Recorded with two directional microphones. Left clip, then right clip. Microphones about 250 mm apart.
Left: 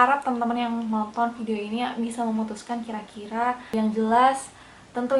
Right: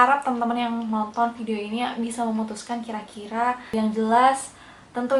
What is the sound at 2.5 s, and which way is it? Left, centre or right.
A woman's voice, centre.